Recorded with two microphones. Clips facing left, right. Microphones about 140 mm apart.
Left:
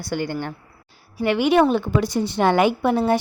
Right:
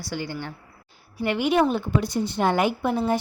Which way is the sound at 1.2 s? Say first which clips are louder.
Left 4 dB; 85° left.